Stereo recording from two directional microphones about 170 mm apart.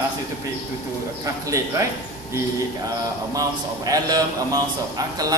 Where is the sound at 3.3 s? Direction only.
20° right (ahead or behind).